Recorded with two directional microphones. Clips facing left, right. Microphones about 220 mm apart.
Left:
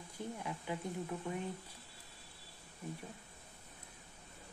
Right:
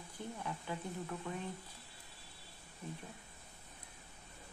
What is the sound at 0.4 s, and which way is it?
Speech, 15° left (ahead or behind).